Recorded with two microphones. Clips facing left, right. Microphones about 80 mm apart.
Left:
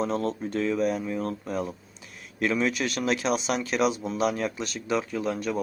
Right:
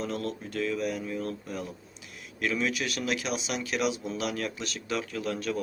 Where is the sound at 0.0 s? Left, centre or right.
Left.